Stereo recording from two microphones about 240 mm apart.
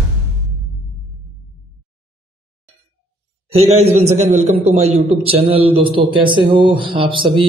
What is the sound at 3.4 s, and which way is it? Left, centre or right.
A man's voice, right.